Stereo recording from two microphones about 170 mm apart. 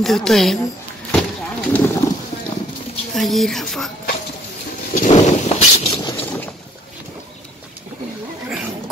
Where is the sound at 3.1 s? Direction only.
Centre (ahead or behind).